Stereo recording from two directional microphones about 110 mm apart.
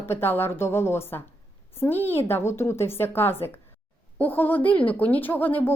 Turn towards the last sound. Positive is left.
turn(degrees=15)  # may be behind; listen again after turning